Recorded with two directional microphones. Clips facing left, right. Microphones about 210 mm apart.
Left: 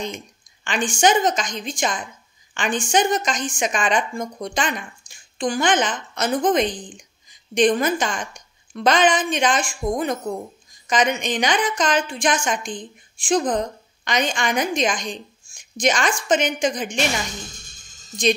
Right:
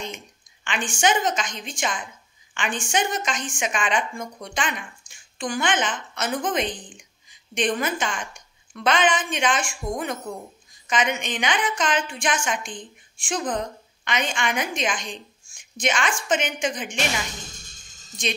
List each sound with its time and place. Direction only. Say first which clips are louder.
0.7 s a woman's voice: left 4 dB; 40° left (ahead or behind)
18.2 s a woman's voice: left 9 dB; 35° left (ahead or behind)